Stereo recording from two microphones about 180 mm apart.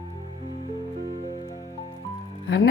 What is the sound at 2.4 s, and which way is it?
Music, 65° left (ahead or behind).